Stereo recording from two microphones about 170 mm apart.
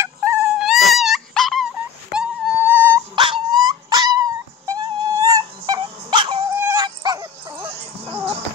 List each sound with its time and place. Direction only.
0.0 s dog: 15° right (ahead or behind); by 1.7 s centre (ahead or behind)
2.1 s music: 10° right (ahead or behind)
3.2 s dog: 30° right (ahead or behind)
6.5 s dog: 15° right (ahead or behind)
7.8 s music: 10° right (ahead or behind)